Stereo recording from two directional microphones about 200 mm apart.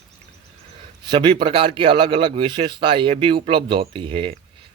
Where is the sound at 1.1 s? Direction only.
25° right (ahead or behind).